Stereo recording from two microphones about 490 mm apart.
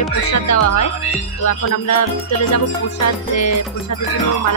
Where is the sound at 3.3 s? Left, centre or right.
Left.